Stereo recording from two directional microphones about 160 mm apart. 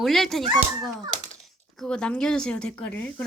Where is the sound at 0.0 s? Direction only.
Centre (ahead or behind).